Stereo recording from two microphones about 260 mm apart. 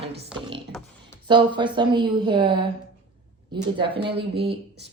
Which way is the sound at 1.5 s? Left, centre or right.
Centre.